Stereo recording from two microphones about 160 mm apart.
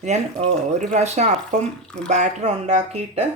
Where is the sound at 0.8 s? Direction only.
45° right (ahead or behind).